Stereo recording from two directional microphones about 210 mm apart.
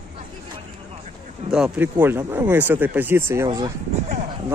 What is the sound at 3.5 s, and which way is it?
Speech, 25° right (ahead or behind).